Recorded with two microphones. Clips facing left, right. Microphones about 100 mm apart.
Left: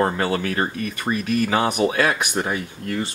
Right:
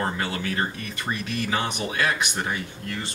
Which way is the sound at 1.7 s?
50° left (ahead or behind).